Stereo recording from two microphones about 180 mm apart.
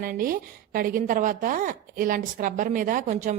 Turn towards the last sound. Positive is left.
turn(degrees=-45)  # may be behind; listen again after turning